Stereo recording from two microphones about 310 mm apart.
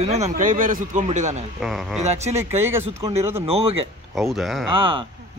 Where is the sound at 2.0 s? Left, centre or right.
Right.